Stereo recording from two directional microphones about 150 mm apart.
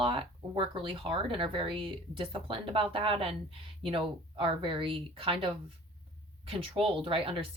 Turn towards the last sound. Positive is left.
turn(degrees=-35)  # may be behind; listen again after turning